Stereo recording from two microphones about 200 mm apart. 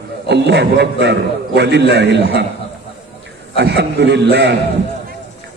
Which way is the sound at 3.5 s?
55° right (ahead or behind).